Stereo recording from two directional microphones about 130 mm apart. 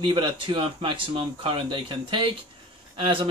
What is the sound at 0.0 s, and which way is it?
Speech, 40° right (ahead or behind).